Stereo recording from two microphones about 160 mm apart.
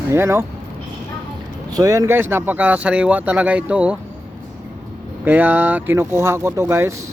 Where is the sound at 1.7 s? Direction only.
20° right (ahead or behind).